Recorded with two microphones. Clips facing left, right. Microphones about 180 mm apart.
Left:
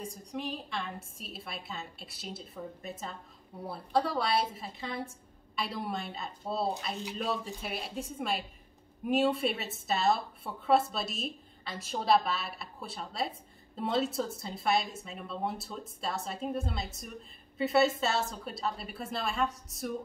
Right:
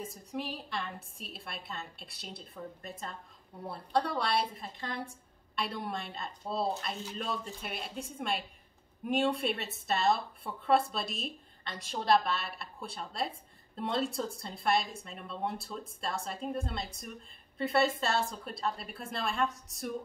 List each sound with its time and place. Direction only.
0.0 s speech: 5° right (ahead or behind)